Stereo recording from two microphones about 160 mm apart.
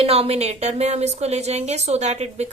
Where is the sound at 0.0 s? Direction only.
40° right (ahead or behind).